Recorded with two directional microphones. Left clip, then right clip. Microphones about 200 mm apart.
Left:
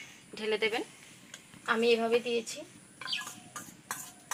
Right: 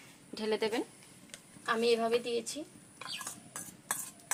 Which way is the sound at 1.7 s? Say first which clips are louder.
Left 2 dB; 35° right (ahead or behind).